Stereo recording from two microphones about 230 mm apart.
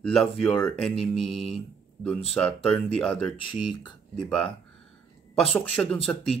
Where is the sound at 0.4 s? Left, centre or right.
Centre.